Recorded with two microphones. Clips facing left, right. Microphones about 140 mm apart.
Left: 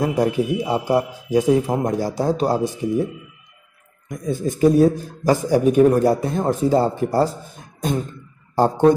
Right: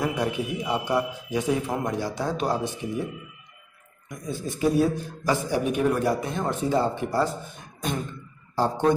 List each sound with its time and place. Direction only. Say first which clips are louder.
0.0 s a man's voice: left 7 dB; 35° left (ahead or behind)
4.3 s a man's voice: left 8 dB; 45° left (ahead or behind)
7.8 s a sound: left 6 dB; 45° left (ahead or behind)